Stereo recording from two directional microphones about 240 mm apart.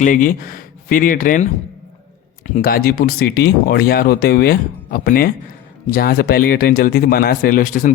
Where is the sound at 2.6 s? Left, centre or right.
Left.